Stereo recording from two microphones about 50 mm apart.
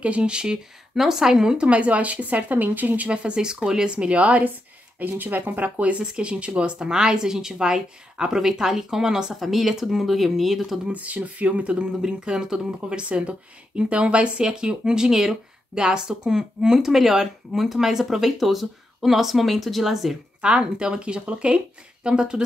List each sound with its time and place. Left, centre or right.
0.0 s speech: right
3.1 s speech: right
4.9 s speech: right; by 10.6 s centre
10.9 s speech: right; by 20.2 s centre
20.4 s speech: centre